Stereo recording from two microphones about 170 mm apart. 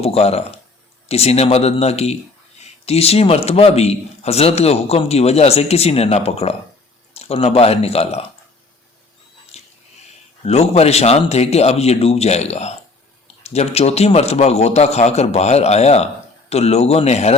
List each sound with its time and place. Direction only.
0.0 s a man's voice: 35° left (ahead or behind)
9.5 s a sound: 40° left (ahead or behind)
10.4 s a man's voice: 40° left (ahead or behind)